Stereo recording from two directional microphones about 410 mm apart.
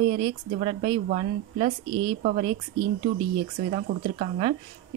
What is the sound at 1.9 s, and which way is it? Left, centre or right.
Speech, right.